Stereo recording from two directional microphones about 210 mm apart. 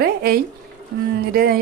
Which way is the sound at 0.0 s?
45° right (ahead or behind).